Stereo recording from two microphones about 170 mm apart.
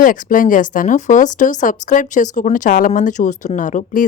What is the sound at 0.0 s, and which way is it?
Speech, 55° left (ahead or behind).